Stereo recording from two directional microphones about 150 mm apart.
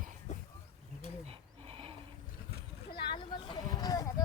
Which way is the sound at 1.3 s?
40° right (ahead or behind).